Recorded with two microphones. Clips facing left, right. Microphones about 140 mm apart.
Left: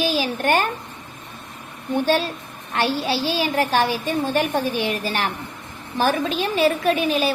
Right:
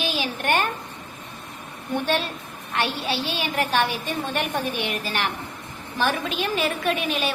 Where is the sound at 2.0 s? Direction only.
35° left (ahead or behind).